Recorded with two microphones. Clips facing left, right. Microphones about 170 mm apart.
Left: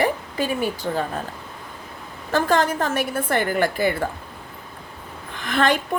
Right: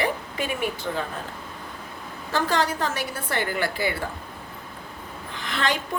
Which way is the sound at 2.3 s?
50° left (ahead or behind).